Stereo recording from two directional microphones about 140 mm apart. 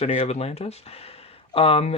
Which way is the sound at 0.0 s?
50° left (ahead or behind).